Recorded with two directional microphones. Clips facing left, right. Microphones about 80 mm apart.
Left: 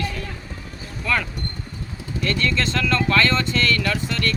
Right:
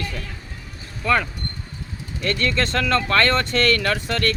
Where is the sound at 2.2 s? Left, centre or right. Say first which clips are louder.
Right 1 dB; right.